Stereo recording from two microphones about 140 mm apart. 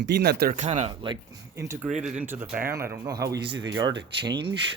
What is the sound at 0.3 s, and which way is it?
Speech, 90° right.